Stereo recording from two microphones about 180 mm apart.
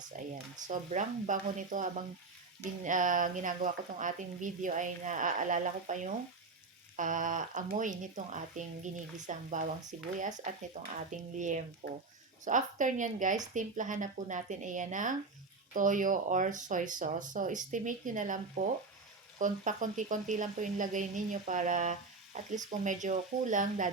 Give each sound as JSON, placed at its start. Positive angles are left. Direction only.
{"t": 0.1, "sound": "speech", "side_deg": -45}